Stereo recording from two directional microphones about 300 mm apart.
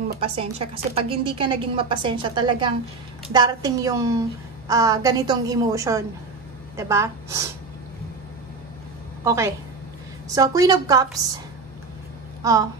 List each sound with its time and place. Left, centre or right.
0.2 s a woman's voice: centre
9.2 s a woman's voice: centre
12.4 s a woman's voice: centre